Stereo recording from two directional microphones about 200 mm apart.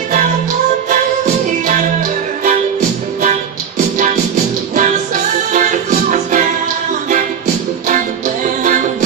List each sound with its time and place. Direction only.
0.8 s music: 40° right (ahead or behind)
3.2 s music: 35° right (ahead or behind)